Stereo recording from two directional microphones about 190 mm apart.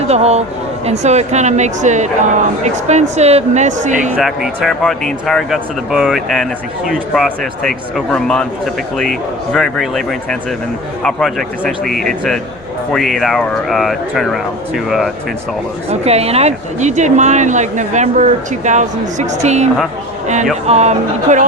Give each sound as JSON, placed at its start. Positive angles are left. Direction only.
{"t": 0.1, "sound": "speech", "side_deg": -35}
{"t": 4.1, "sound": "speech", "side_deg": 0}
{"t": 15.9, "sound": "speech", "side_deg": -35}